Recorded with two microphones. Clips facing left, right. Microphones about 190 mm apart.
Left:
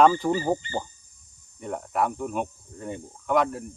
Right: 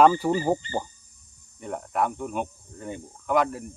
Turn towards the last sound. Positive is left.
turn(degrees=0)  # may be behind; listen again after turning